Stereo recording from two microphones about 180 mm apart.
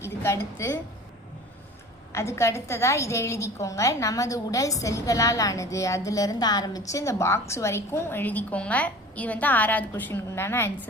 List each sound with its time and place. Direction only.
0.0 s a woman's voice: 15° left (ahead or behind)
2.1 s a woman's voice: 15° left (ahead or behind)